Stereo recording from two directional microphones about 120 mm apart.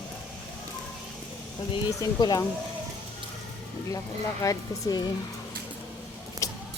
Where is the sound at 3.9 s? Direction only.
30° left (ahead or behind).